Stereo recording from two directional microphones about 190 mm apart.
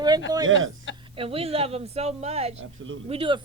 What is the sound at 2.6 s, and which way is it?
Speech, 90° right.